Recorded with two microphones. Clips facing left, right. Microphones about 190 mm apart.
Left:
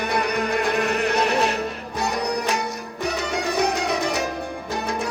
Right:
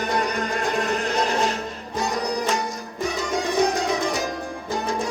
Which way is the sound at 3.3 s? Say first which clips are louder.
Right 2 dB; 65° left (ahead or behind).